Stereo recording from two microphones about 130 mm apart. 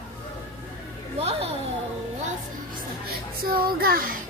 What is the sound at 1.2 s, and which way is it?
Speech, 50° right (ahead or behind).